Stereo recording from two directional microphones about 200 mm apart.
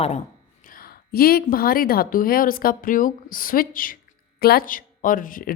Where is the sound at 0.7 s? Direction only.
50° left (ahead or behind).